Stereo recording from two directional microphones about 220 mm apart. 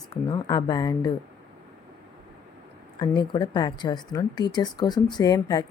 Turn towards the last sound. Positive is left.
turn(degrees=15)  # may be behind; listen again after turning